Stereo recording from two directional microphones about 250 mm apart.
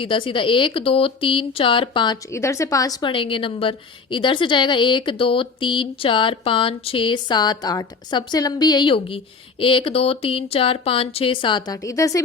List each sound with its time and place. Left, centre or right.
0.0 s speech: left